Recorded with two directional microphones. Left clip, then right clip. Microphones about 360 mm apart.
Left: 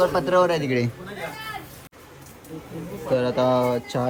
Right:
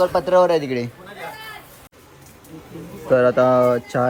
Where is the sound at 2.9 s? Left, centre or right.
Centre.